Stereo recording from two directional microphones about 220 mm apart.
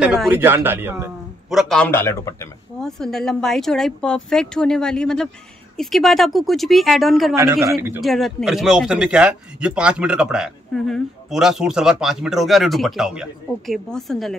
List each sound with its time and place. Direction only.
0.0 s speech: 5° right (ahead or behind); by 2.5 s 15° left (ahead or behind)
2.8 s speech: centre (ahead or behind)
7.3 s a man's voice: 15° right (ahead or behind)
8.0 s speech: centre (ahead or behind)